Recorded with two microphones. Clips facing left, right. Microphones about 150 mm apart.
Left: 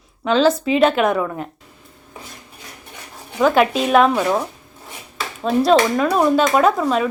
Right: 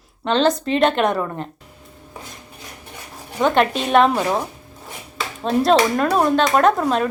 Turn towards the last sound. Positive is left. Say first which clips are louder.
# even
turn(degrees=0)  # may be behind; listen again after turning